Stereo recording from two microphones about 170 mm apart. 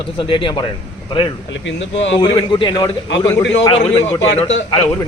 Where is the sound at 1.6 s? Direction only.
90° left.